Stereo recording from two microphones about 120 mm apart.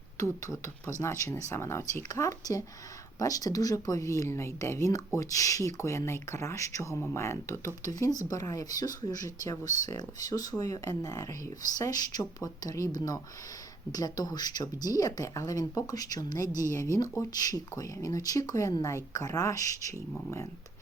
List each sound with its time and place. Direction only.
0.2 s speech: 30° left (ahead or behind)